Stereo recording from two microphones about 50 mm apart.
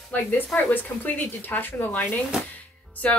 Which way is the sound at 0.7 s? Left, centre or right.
Left.